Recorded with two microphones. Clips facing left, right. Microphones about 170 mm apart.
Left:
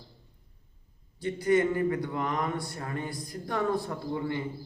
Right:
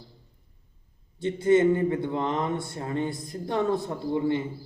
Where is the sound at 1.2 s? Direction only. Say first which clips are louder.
Right 5 dB; 25° right (ahead or behind).